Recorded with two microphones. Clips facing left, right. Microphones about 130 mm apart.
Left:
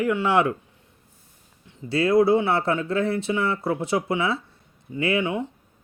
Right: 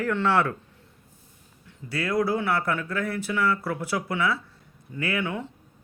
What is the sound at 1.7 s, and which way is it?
Speech, 25° left (ahead or behind).